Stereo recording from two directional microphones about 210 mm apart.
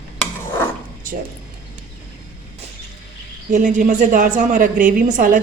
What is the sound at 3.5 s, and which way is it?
A woman's voice, 35° right (ahead or behind).